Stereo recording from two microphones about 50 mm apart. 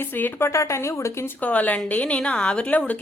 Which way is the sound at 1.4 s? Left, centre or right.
Left.